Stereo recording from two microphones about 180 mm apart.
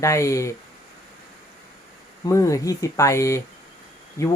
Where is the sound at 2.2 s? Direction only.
15° left (ahead or behind).